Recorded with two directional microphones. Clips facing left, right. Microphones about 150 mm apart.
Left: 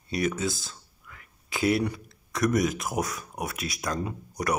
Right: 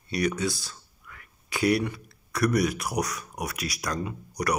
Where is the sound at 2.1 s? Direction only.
20° left (ahead or behind).